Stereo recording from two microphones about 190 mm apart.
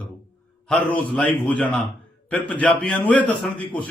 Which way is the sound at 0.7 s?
5° left (ahead or behind).